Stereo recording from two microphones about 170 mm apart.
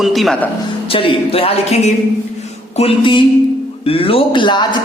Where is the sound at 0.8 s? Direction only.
30° left (ahead or behind).